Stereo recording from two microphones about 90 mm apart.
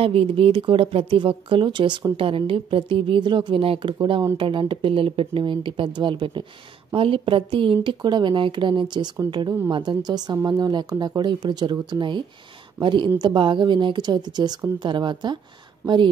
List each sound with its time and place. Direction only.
0.0 s speech: 90° right; by 2.0 s 60° right (ahead or behind)
2.1 s speech: 80° right; by 6.4 s 65° right (ahead or behind)
6.9 s a woman's voice: 80° right; by 16.1 s 60° right (ahead or behind)